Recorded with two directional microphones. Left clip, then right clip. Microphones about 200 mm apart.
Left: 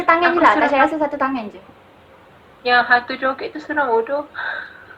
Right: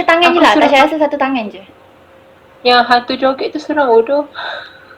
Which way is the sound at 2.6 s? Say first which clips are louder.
Right 5 dB; 55° right (ahead or behind).